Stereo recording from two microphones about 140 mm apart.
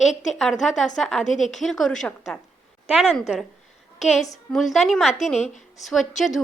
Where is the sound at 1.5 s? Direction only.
Centre (ahead or behind).